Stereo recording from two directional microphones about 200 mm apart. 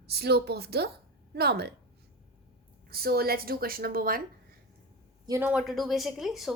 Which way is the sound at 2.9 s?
50° right (ahead or behind).